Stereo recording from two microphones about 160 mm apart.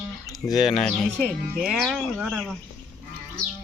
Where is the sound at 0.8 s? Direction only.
5° left (ahead or behind).